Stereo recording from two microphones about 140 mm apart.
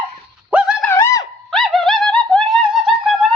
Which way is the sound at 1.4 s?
Centre (ahead or behind).